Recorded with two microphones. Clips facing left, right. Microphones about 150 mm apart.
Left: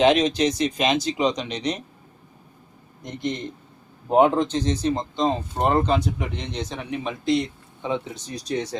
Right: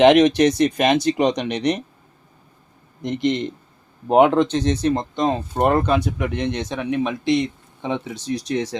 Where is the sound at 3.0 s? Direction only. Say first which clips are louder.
Right 7 dB; 90° right.